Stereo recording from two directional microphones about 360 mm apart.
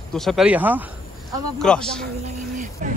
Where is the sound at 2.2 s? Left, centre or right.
Right.